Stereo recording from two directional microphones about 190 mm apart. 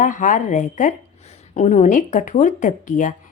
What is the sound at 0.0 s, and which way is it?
A woman's voice, 40° left (ahead or behind).